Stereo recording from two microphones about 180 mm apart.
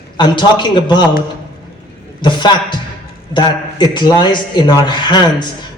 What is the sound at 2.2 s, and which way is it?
A man's voice, 25° left (ahead or behind).